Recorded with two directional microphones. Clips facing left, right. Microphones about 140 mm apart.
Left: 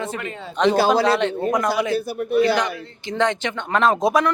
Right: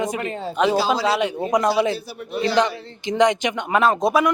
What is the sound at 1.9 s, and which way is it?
Speech, 50° left (ahead or behind).